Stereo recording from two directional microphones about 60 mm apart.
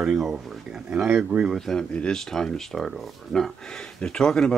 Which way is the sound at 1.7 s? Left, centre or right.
Centre.